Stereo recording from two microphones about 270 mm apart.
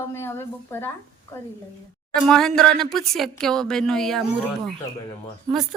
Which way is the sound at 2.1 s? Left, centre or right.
Centre.